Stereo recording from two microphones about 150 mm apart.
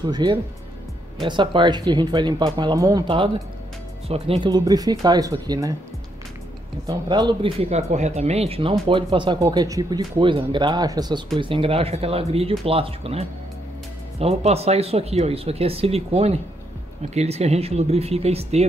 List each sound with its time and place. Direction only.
0.0 s speech: 30° right (ahead or behind)
4.1 s speech: 40° right (ahead or behind)
4.5 s speech: 25° right (ahead or behind)
6.9 s speech: 30° right (ahead or behind); by 18.7 s 45° right (ahead or behind)